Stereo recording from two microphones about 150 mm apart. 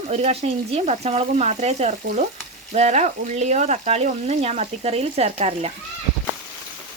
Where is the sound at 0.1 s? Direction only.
45° right (ahead or behind).